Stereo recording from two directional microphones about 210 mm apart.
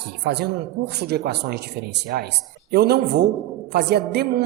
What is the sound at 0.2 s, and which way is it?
A man's voice, 50° right (ahead or behind).